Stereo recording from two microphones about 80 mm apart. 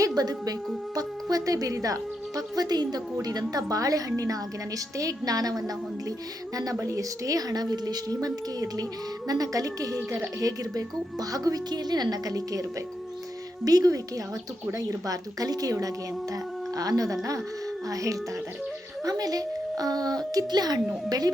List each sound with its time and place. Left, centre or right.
0.0 s a woman's voice: right
13.7 s a woman's voice: right